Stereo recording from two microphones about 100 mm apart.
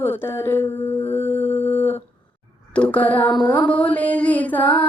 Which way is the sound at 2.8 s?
15° left (ahead or behind).